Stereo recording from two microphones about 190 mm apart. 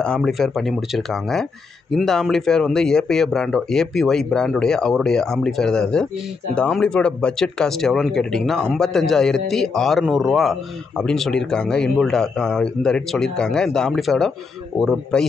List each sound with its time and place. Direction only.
0.0 s speech: centre (ahead or behind)